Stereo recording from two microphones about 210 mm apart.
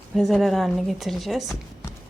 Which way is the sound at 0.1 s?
Centre (ahead or behind).